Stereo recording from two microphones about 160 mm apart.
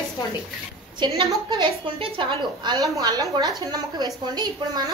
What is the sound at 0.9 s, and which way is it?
A woman's voice, 25° right (ahead or behind).